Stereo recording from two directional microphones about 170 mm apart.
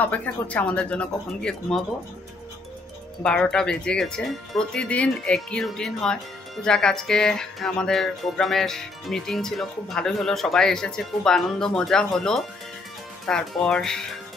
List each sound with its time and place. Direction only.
0.0 s speech: 10° left (ahead or behind)
3.2 s speech: 5° left (ahead or behind)